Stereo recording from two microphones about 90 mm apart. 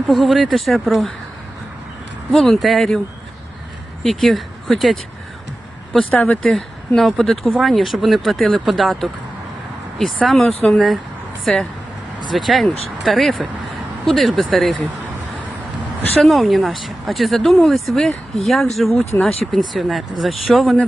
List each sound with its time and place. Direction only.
0.1 s speech: centre (ahead or behind)
2.3 s speech: centre (ahead or behind)
4.0 s speech: centre (ahead or behind)
6.1 s speech: 20° left (ahead or behind)
6.4 s speech: 5° left (ahead or behind)
16.1 s speech: centre (ahead or behind)